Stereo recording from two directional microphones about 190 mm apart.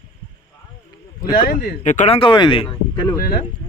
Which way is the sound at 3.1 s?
50° left (ahead or behind).